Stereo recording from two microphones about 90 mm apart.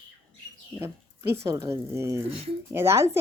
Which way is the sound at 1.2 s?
35° right (ahead or behind).